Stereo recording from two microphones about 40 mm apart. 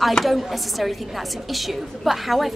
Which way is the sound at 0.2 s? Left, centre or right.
Centre.